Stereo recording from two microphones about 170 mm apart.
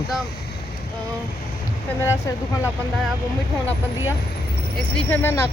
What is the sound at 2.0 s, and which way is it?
Speech, 15° left (ahead or behind).